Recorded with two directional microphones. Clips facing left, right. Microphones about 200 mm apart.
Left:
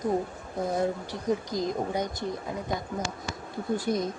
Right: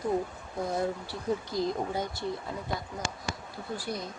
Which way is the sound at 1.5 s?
20° left (ahead or behind).